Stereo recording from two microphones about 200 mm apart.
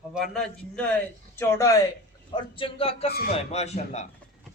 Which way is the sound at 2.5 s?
25° left (ahead or behind).